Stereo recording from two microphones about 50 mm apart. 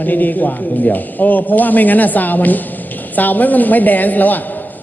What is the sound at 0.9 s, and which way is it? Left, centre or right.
A woman's voice, left.